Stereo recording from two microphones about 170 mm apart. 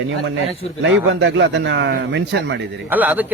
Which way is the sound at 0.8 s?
90° right.